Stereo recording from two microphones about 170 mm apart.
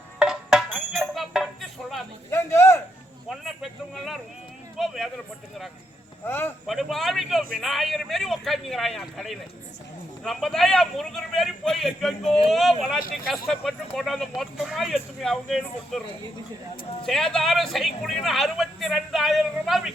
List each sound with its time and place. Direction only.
0.2 s music: 5° right (ahead or behind)
2.3 s speech: 15° left (ahead or behind)
3.2 s a man's voice: centre (ahead or behind)
6.2 s speech: 15° left (ahead or behind)
6.7 s a man's voice: centre (ahead or behind)
17.1 s a man's voice: centre (ahead or behind)